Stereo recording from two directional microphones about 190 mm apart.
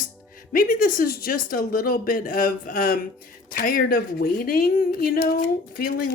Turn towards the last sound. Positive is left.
turn(degrees=50)  # may be behind; listen again after turning